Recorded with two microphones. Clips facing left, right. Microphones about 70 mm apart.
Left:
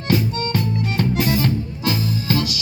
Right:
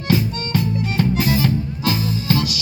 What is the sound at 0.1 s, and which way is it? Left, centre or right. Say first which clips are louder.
Music: even; left.